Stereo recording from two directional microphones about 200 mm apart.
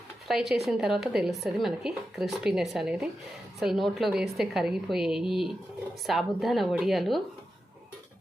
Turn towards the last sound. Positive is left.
turn(degrees=0)  # may be behind; listen again after turning